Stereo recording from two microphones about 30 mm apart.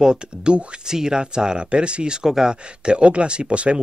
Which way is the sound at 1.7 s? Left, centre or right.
Right.